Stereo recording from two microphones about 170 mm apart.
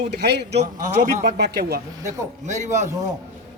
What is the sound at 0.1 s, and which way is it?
Speech, 75° right (ahead or behind).